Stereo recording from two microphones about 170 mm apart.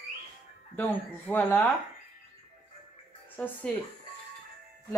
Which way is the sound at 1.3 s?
10° left (ahead or behind).